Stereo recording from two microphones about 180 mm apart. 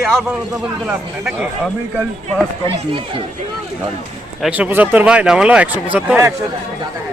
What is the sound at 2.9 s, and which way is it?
Speech, 30° right (ahead or behind).